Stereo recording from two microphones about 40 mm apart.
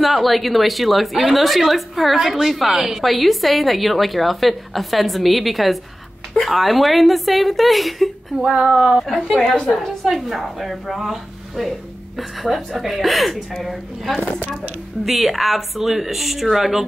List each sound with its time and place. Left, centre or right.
0.0 s a woman's voice: centre
8.4 s speech: right
9.0 s a woman's voice: centre